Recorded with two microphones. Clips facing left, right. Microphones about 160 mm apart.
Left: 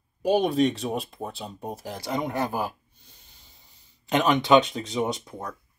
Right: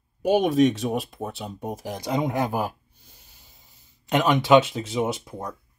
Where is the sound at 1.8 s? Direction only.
15° right (ahead or behind).